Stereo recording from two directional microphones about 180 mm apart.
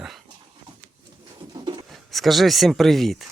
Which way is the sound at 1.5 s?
25° right (ahead or behind).